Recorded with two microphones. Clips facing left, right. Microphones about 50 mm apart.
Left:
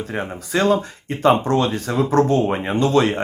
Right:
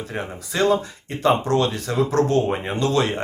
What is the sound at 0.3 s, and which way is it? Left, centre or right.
Speech, left.